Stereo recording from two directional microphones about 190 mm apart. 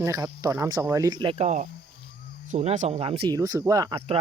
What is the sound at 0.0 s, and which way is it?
Speech, 15° right (ahead or behind).